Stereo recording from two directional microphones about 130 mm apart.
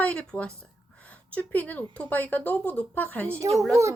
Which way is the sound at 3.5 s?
Centre (ahead or behind).